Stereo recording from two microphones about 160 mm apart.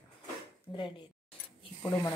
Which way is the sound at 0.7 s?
35° left (ahead or behind).